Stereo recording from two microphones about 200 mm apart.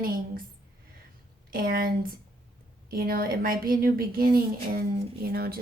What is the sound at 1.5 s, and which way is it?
A woman's voice, 45° right (ahead or behind).